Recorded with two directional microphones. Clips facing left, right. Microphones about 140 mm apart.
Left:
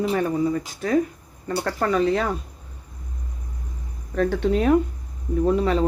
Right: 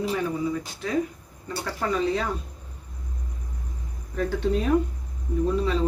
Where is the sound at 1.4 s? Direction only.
60° left (ahead or behind).